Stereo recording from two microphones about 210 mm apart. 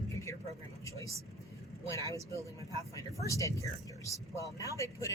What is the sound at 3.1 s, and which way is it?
Speech, 15° right (ahead or behind).